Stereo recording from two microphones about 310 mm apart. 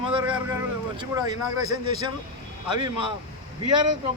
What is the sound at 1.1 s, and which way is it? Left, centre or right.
Speech, centre.